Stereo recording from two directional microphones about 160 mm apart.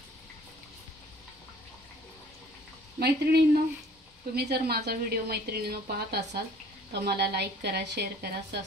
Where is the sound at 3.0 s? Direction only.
80° right.